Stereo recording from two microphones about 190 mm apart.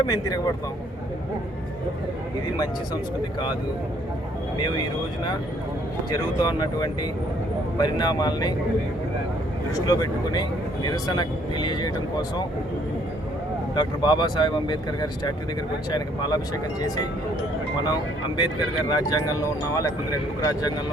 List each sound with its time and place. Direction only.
0.0 s speech: 20° left (ahead or behind)
4.5 s speech: 20° left (ahead or behind)
9.7 s speech: 20° left (ahead or behind)
13.7 s speech: 20° left (ahead or behind)
17.8 s speech: 20° left (ahead or behind)